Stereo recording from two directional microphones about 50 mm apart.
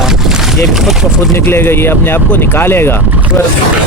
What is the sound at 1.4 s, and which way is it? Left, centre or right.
Speech, left.